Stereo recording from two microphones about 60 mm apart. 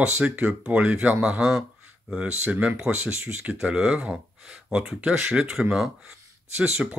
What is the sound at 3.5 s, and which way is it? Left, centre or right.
Speech, centre.